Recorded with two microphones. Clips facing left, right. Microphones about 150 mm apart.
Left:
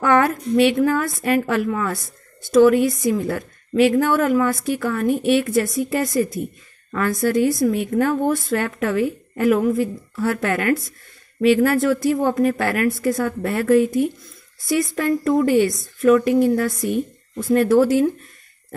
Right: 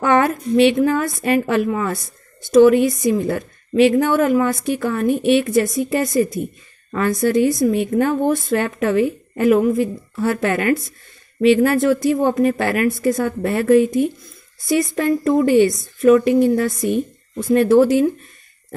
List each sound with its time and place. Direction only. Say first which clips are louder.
0.0 s a woman's voice: right 1 dB; 20° right (ahead or behind)